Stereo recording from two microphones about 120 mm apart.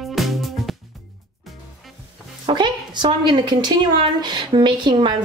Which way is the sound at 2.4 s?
40° right (ahead or behind).